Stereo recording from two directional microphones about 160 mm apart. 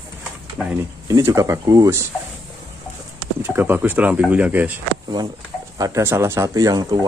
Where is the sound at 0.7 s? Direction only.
20° right (ahead or behind).